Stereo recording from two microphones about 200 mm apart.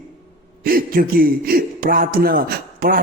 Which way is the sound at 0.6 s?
45° right (ahead or behind).